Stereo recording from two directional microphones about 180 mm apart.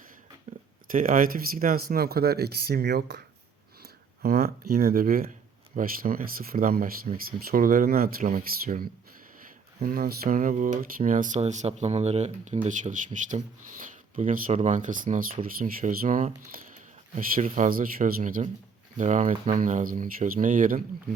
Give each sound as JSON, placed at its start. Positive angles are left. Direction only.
{"t": 0.5, "sound": "a sound", "side_deg": -35}
{"t": 0.9, "sound": "speech", "side_deg": -50}
{"t": 3.8, "sound": "speech", "side_deg": -60}